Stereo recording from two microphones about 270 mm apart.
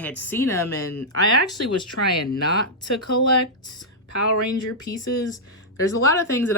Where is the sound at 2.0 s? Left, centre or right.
Left.